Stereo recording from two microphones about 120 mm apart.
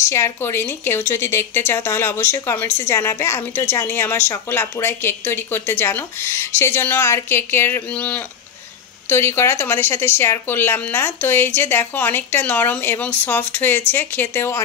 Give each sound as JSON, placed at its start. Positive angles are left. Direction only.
{"t": 0.0, "sound": "a woman's voice", "side_deg": 25}